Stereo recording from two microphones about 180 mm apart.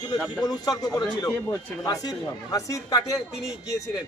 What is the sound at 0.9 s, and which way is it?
A man's voice, 20° left (ahead or behind).